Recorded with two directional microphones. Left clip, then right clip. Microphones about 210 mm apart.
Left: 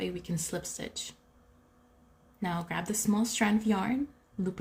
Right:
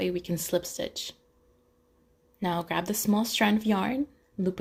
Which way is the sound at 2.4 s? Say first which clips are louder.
Right 5 dB; 30° right (ahead or behind).